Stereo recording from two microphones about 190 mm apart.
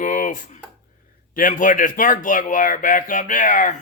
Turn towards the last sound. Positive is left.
turn(degrees=45)  # may be behind; listen again after turning